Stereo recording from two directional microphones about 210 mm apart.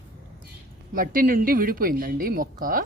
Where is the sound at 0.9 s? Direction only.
40° right (ahead or behind).